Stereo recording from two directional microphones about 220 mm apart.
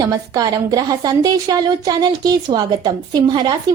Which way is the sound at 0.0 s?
15° right (ahead or behind).